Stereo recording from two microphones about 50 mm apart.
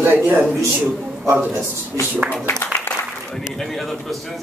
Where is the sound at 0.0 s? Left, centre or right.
Right.